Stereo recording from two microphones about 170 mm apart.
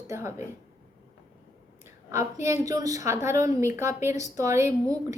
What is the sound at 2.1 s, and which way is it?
A woman's voice, 15° right (ahead or behind).